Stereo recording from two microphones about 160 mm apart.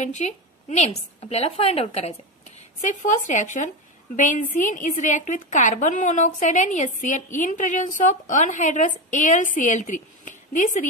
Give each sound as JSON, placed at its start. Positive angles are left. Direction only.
{"t": 0.0, "sound": "a woman's voice", "side_deg": 45}
{"t": 2.8, "sound": "a woman's voice", "side_deg": 50}